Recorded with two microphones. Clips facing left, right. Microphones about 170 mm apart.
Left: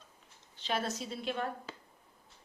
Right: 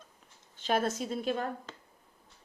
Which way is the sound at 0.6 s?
50° right (ahead or behind).